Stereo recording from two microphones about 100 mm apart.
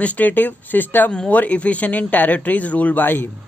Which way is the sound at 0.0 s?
15° left (ahead or behind).